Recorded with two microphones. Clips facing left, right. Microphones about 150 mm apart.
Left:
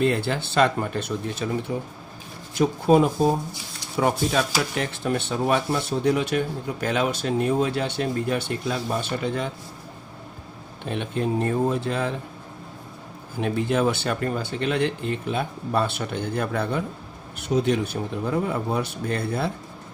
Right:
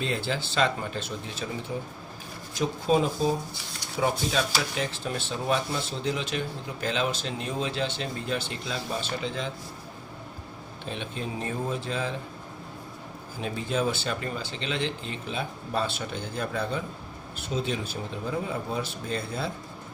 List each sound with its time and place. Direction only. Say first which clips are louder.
0.0 s speech: left 7 dB; 60° left (ahead or behind)
1.7 s speech: left 4 dB; 65° left (ahead or behind)
10.8 s speech: left 8 dB; 60° left (ahead or behind)
13.4 s speech: left 6 dB; 60° left (ahead or behind)